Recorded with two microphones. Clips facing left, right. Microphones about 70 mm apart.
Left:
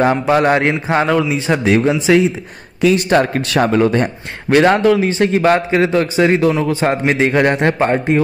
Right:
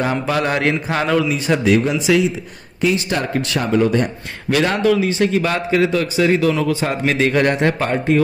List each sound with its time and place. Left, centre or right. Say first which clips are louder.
0.0 s a man's voice: left 6 dB; left
1.0 s a man's voice: right 1 dB; centre
1.3 s a man's voice: left 1 dB; left
2.8 s speech: left 6 dB; left
3.2 s a man's voice: left 6 dB; left